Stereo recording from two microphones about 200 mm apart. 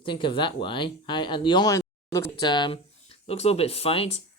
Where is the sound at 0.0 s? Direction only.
25° left (ahead or behind).